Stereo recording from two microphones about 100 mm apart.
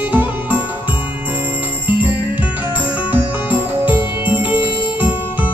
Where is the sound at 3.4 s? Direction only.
15° right (ahead or behind).